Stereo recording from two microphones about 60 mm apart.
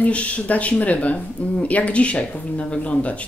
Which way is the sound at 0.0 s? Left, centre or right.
Left.